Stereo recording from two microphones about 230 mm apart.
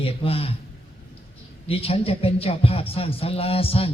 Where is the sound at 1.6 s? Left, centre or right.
Left.